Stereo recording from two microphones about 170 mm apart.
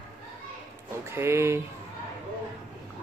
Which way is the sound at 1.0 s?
15° right (ahead or behind).